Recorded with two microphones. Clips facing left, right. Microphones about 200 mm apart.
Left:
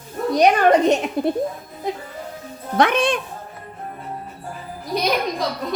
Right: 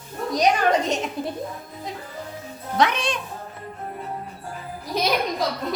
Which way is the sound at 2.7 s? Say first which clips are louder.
Left 5 dB; 55° left (ahead or behind).